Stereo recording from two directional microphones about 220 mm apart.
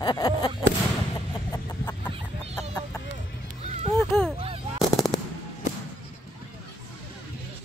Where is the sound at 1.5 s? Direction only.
10° left (ahead or behind).